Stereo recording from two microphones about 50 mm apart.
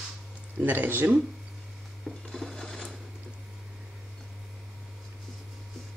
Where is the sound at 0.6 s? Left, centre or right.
Right.